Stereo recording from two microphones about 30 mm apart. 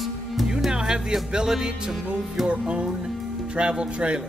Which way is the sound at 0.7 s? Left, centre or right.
Right.